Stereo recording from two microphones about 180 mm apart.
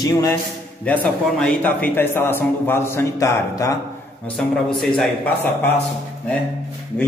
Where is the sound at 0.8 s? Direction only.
5° left (ahead or behind).